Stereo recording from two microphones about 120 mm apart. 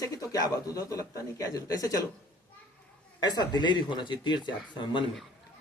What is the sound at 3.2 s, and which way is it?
Speech, 35° left (ahead or behind).